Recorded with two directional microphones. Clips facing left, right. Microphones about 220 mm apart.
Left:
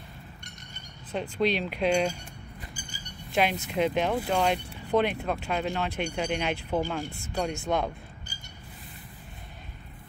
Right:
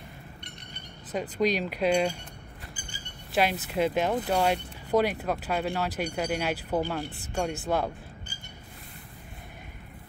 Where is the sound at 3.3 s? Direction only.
5° right (ahead or behind).